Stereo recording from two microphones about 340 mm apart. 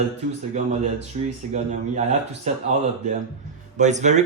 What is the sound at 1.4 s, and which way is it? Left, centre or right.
Speech, right.